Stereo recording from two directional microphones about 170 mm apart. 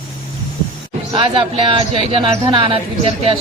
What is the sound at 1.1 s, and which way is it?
Speech, 30° right (ahead or behind).